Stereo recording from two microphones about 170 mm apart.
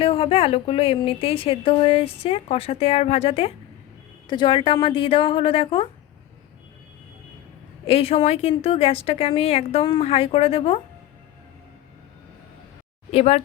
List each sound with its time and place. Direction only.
0.0 s speech: 35° left (ahead or behind)
7.9 s speech: 35° left (ahead or behind)
13.1 s speech: 40° left (ahead or behind)